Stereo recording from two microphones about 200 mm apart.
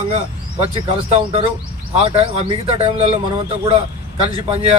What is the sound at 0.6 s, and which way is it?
Speech, 30° right (ahead or behind).